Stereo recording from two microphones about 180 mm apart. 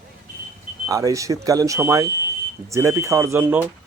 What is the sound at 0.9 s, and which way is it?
Speech, 20° right (ahead or behind).